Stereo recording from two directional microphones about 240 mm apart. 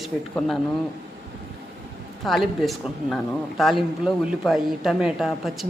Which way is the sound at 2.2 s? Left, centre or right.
Centre.